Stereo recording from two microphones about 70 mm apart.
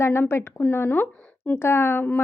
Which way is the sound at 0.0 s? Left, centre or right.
Left.